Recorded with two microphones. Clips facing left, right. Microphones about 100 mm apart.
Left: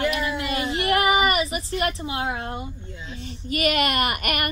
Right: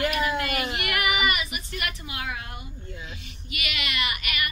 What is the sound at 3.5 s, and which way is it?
Speech, 45° left (ahead or behind).